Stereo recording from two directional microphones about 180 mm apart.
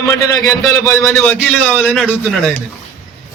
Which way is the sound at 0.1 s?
15° left (ahead or behind).